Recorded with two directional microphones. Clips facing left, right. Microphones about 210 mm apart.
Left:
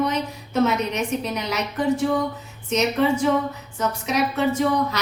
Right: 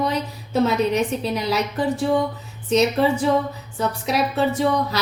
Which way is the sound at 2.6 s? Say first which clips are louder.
Right 2 dB; 35° right (ahead or behind).